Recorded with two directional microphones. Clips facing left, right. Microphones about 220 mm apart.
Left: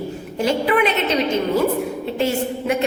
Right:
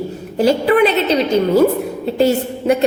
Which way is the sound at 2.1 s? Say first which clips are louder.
Right 6 dB; 35° right (ahead or behind).